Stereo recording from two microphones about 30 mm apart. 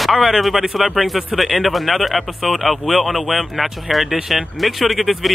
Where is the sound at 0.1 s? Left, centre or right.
Centre.